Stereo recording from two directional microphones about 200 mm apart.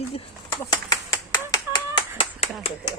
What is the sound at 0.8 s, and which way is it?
Clapping, 20° left (ahead or behind).